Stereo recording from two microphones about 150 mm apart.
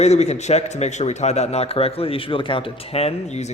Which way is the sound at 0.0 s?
50° left (ahead or behind).